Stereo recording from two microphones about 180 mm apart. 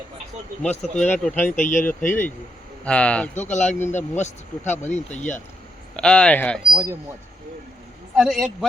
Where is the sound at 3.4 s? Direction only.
40° left (ahead or behind).